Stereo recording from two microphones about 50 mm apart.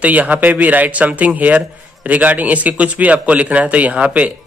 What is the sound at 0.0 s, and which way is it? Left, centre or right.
A man's voice, right.